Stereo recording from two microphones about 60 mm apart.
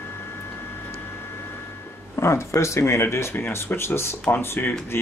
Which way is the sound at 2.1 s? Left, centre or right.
Left.